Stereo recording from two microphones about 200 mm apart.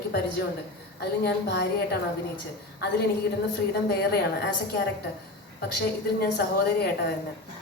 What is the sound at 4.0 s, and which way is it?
Speech, 55° left (ahead or behind).